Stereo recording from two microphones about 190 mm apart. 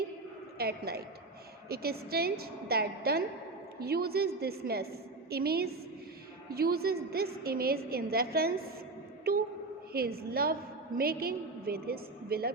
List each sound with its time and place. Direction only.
0.6 s a woman's voice: 55° right (ahead or behind)
9.3 s a sound: 50° right (ahead or behind)
9.9 s a woman's voice: 55° right (ahead or behind)